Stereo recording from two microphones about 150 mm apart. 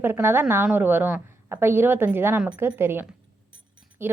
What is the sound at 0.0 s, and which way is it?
A woman's voice, 15° right (ahead or behind).